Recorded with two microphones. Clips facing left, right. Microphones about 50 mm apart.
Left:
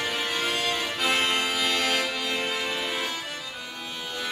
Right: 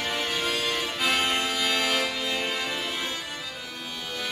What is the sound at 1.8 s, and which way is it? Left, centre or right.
Music, centre.